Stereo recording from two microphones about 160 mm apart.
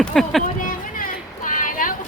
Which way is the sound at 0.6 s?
60° left (ahead or behind).